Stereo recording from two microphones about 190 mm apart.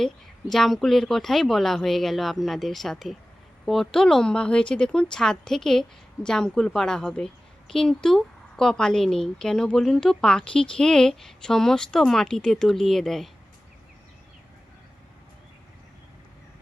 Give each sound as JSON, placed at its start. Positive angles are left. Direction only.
{"t": 0.0, "sound": "a woman's voice", "side_deg": 0}